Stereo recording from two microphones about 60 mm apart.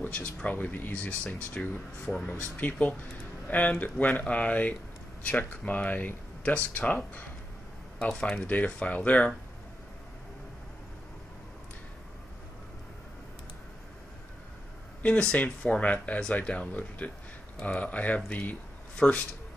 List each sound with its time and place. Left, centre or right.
0.0 s speech: left
8.0 s speech: centre
15.3 s speech: left